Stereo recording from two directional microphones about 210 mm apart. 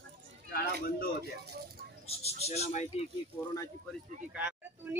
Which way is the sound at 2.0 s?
30° left (ahead or behind).